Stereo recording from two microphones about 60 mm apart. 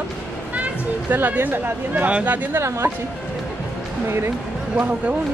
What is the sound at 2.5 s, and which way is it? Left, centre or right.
Speech, right.